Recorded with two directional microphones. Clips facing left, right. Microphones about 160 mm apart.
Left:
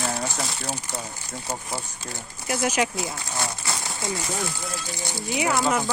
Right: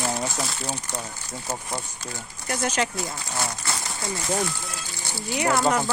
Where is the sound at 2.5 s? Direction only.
10° left (ahead or behind).